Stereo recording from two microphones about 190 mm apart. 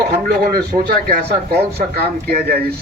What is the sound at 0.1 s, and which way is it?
A man's voice, 50° right (ahead or behind).